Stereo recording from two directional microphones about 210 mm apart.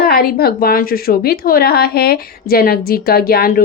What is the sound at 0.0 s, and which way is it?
A woman's voice, 45° left (ahead or behind).